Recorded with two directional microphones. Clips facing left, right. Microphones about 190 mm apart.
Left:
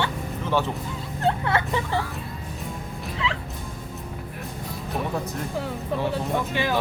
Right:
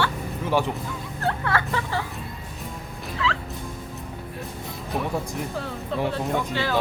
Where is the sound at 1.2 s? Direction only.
20° left (ahead or behind).